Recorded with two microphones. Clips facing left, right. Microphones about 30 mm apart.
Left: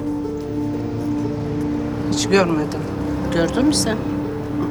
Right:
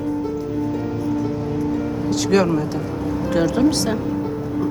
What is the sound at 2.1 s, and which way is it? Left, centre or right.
A man's voice, centre.